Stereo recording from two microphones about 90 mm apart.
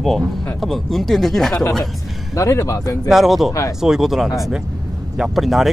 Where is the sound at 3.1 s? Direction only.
Centre (ahead or behind).